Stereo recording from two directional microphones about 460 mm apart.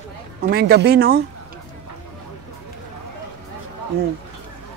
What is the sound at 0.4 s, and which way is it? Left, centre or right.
Speech, centre.